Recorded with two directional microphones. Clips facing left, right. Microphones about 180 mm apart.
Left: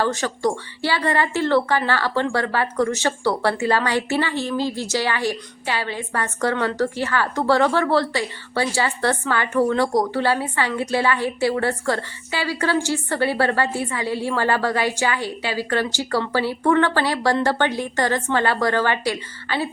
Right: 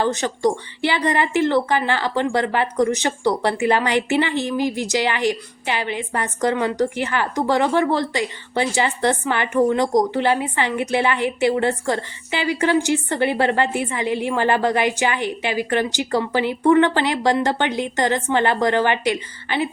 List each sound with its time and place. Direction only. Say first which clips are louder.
0.0 s a woman's voice: right 2 dB; 20° right (ahead or behind)